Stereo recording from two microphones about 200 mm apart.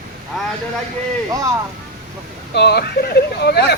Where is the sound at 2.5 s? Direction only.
55° left (ahead or behind).